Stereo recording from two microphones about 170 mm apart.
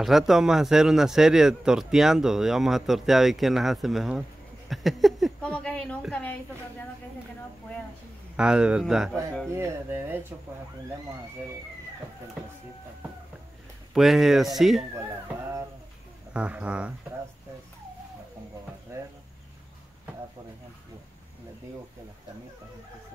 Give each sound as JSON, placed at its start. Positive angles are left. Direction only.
{"t": 0.0, "sound": "a woman's voice", "side_deg": 0}
{"t": 8.4, "sound": "speech", "side_deg": -5}
{"t": 9.5, "sound": "speech", "side_deg": -15}
{"t": 13.9, "sound": "speech", "side_deg": 0}
{"t": 16.3, "sound": "speech", "side_deg": -5}
{"t": 18.9, "sound": "cricket", "side_deg": -15}